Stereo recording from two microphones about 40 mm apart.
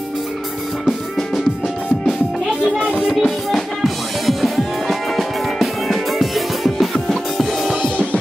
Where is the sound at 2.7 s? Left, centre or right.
Right.